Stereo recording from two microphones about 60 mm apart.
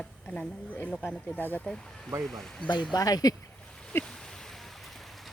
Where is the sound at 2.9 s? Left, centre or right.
Left.